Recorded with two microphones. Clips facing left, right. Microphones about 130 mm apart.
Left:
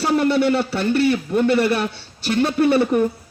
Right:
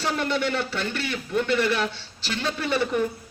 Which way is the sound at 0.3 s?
40° left (ahead or behind).